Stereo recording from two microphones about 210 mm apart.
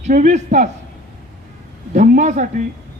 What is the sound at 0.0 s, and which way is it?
Speech, 35° right (ahead or behind).